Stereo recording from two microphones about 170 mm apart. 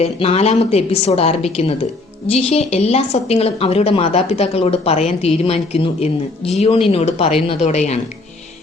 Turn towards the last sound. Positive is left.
turn(degrees=40)  # may be behind; listen again after turning